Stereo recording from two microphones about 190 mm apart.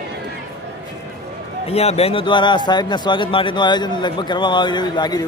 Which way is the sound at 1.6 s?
35° left (ahead or behind).